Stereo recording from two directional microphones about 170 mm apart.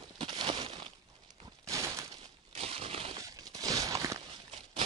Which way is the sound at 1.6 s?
20° right (ahead or behind).